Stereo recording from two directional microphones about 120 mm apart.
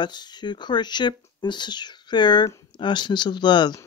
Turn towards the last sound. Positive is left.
turn(degrees=40)  # may be behind; listen again after turning